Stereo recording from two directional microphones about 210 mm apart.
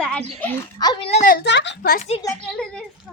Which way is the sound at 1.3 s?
50° left (ahead or behind).